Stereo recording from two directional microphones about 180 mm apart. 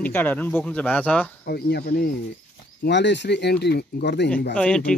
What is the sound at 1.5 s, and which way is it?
Speech, 65° left (ahead or behind).